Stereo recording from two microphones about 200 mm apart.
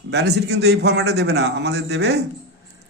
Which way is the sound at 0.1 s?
55° right (ahead or behind).